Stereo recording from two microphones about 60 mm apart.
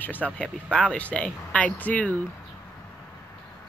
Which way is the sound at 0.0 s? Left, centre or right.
Left.